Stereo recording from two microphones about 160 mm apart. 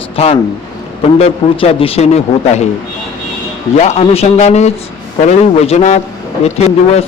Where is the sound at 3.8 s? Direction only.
40° left (ahead or behind).